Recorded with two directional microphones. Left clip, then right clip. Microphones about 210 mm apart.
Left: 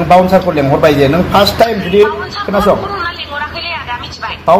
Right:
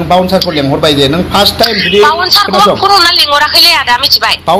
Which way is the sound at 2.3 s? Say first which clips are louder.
Right 5 dB; 55° right (ahead or behind).